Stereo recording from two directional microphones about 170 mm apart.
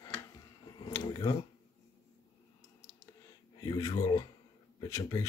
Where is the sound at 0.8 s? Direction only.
25° left (ahead or behind).